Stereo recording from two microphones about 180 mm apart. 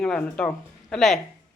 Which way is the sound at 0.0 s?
5° left (ahead or behind).